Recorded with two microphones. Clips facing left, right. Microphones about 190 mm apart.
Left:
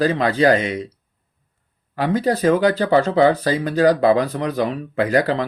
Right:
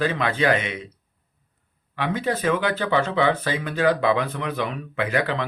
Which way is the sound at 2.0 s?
40° left (ahead or behind).